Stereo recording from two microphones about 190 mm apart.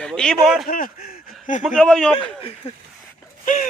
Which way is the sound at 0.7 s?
50° left (ahead or behind).